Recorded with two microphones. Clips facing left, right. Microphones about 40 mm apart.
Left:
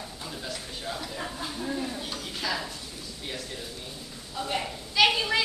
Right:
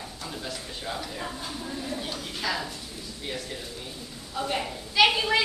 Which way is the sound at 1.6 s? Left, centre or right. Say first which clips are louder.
Left 7 dB; centre.